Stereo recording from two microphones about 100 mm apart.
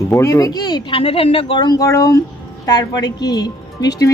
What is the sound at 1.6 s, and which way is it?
Speech, 40° left (ahead or behind).